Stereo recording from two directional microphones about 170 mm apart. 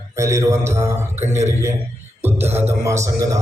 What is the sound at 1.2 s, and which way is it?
Speech, 40° right (ahead or behind).